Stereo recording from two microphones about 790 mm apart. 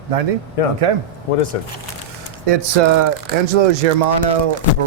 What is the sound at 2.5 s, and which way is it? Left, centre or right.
Speech, right.